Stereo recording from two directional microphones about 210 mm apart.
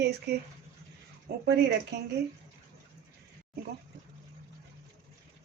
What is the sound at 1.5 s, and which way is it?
Speech, 50° right (ahead or behind).